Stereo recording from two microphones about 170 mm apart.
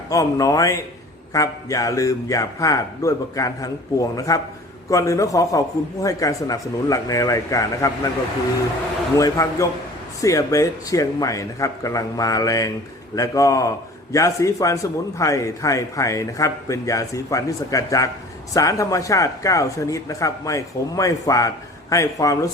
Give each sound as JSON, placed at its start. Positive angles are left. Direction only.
{"t": 0.1, "sound": "speech", "side_deg": 20}
{"t": 9.1, "sound": "speech", "side_deg": 20}